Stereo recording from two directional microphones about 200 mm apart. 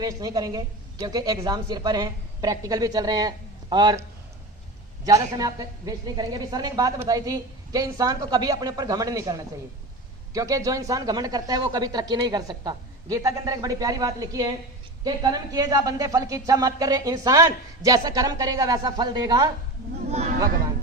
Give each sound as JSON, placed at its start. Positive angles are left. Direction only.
{"t": 0.0, "sound": "speech", "side_deg": -20}
{"t": 5.0, "sound": "speech", "side_deg": -20}
{"t": 10.3, "sound": "speech", "side_deg": -15}